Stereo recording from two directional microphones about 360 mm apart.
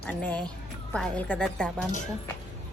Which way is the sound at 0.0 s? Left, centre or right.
Centre.